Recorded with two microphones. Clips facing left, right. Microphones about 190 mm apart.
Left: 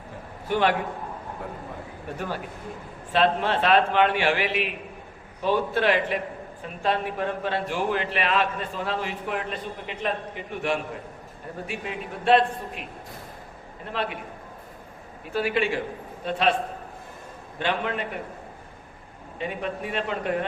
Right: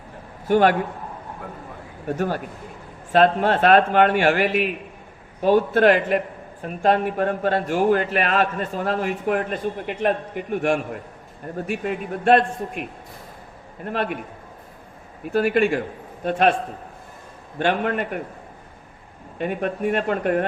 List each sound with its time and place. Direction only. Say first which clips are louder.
0.4 s a man's voice: right 6 dB; 45° right (ahead or behind)
2.1 s a man's voice: right 6 dB; 45° right (ahead or behind)
13.8 s a man's voice: right 5 dB; 50° right (ahead or behind)
15.3 s a man's voice: right 6 dB; 50° right (ahead or behind)
17.6 s a man's voice: right 5 dB; 50° right (ahead or behind)
19.4 s a man's voice: right 6 dB; 50° right (ahead or behind)